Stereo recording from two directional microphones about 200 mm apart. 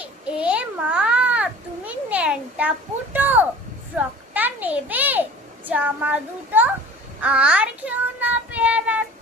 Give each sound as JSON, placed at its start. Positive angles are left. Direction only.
{"t": 0.0, "sound": "a sound", "side_deg": -5}
{"t": 3.9, "sound": "a child's voice", "side_deg": -10}
{"t": 5.6, "sound": "child singing", "side_deg": -10}